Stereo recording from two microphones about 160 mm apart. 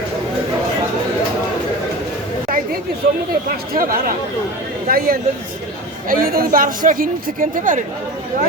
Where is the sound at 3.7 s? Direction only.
65° right (ahead or behind).